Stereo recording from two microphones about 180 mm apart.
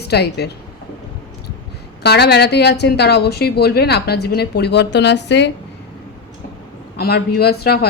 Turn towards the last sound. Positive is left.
turn(degrees=60)  # may be behind; listen again after turning